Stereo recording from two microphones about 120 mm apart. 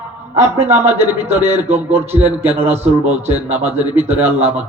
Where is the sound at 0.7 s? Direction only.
60° right (ahead or behind).